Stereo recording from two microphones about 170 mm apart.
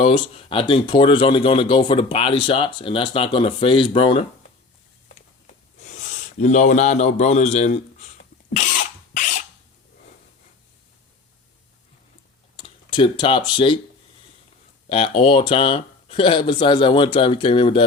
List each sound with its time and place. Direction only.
0.0 s speech: 30° left (ahead or behind)
6.4 s speech: 45° left (ahead or behind)
8.4 s cough: 55° left (ahead or behind)
12.5 s speech: 30° left (ahead or behind)
14.8 s speech: 35° left (ahead or behind)